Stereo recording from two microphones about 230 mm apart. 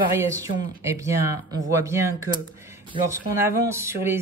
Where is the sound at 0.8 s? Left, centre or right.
Centre.